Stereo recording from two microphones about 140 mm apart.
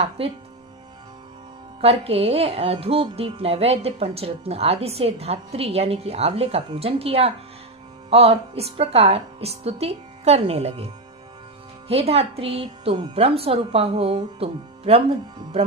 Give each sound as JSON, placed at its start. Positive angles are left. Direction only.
{"t": 1.8, "sound": "speech", "side_deg": -45}